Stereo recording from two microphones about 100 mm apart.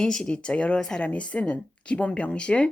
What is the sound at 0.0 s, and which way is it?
Speech, 5° left (ahead or behind).